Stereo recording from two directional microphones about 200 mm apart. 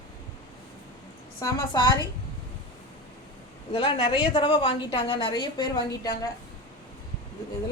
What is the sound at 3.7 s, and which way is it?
A woman's voice, 20° left (ahead or behind).